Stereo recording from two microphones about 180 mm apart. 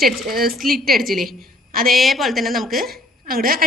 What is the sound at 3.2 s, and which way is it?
Speech, 55° right (ahead or behind).